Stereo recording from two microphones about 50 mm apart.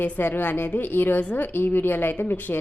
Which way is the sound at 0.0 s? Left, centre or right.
Left.